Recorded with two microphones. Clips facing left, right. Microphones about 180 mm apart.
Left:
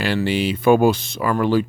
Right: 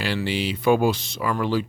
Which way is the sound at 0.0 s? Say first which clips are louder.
Left 5 dB; 55° left (ahead or behind).